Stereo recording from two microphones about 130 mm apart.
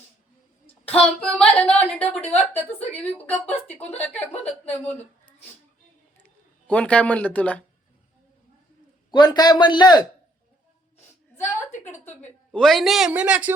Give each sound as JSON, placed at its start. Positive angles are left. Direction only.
{"t": 0.9, "sound": "a woman's voice", "side_deg": 10}
{"t": 6.7, "sound": "a woman's voice", "side_deg": 10}
{"t": 9.1, "sound": "a man's voice", "side_deg": 35}
{"t": 12.5, "sound": "a woman's voice", "side_deg": 0}